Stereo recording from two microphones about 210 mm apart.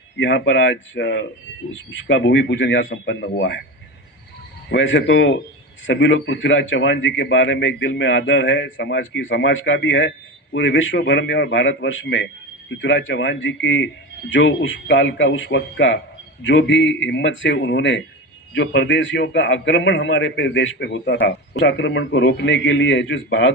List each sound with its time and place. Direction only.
0.2 s a man's voice: 60° left (ahead or behind)
4.7 s a man's voice: 60° left (ahead or behind)